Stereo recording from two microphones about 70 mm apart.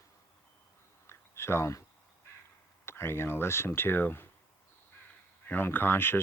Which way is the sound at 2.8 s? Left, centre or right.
Left.